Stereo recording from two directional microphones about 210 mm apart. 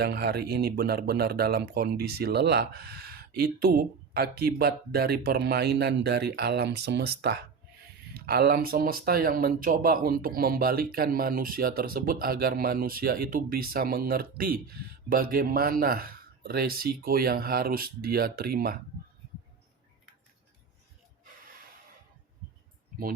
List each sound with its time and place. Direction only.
0.0 s speech: 50° right (ahead or behind)